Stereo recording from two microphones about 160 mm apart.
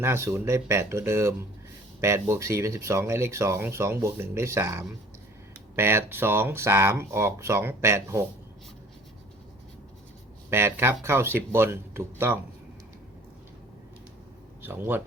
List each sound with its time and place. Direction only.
0.0 s speech: 15° right (ahead or behind)
10.5 s speech: 15° right (ahead or behind)
14.6 s speech: 15° right (ahead or behind)